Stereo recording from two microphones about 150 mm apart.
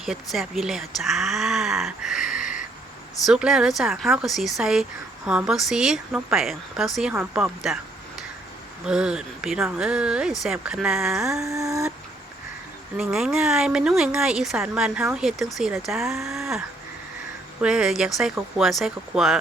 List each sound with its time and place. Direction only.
0.0 s speech: centre (ahead or behind)
2.3 s a sound: 60° left (ahead or behind)
3.2 s speech: 5° right (ahead or behind)
8.9 s speech: 5° right (ahead or behind)
11.4 s a sound: 20° right (ahead or behind)
13.0 s speech: 5° right (ahead or behind)